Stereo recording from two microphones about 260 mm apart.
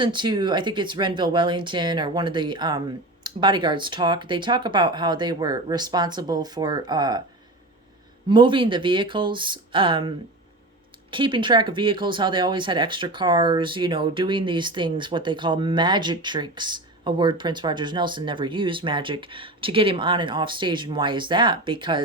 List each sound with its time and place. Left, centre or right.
0.0 s speech: centre
8.3 s speech: centre